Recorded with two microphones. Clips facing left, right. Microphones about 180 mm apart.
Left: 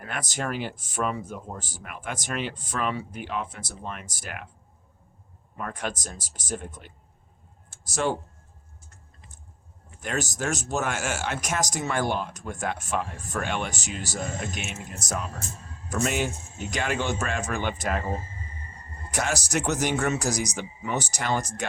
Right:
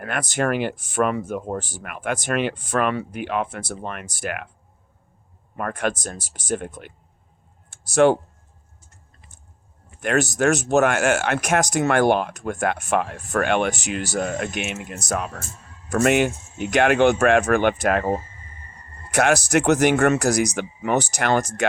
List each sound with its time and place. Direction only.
0.0 s speech: 65° right (ahead or behind)
5.5 s speech: 60° right (ahead or behind)
10.0 s speech: 65° right (ahead or behind)